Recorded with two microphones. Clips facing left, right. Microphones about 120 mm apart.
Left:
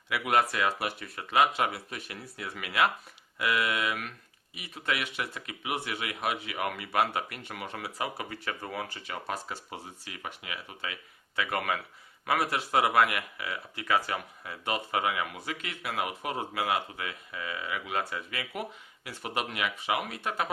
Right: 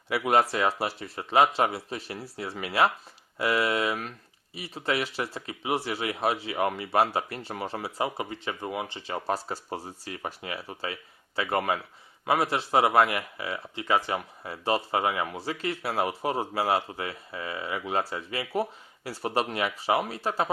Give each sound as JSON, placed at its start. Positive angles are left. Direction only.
{"t": 0.1, "sound": "speech", "side_deg": -30}